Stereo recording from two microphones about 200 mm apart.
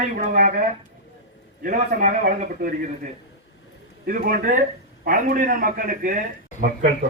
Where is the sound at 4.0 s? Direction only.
50° right (ahead or behind).